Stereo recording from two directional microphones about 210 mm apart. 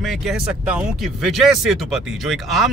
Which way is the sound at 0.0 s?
Centre (ahead or behind).